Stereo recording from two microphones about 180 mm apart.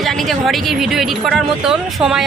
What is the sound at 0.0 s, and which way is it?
Speech, centre (ahead or behind).